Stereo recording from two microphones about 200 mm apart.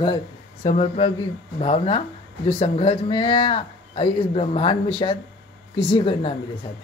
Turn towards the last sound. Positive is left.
turn(degrees=25)  # may be behind; listen again after turning